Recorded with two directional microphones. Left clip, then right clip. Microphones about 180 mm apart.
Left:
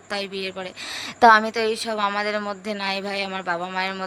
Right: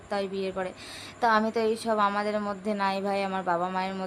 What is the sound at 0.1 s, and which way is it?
Speech, 55° left (ahead or behind).